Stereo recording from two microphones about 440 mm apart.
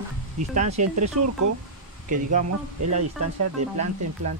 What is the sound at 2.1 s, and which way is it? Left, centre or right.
Speech, centre.